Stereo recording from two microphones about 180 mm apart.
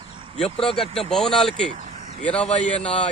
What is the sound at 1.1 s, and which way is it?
A man's voice, centre (ahead or behind).